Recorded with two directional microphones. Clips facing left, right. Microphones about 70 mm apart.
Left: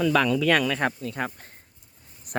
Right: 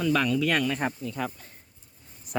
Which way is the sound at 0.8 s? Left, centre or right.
Left.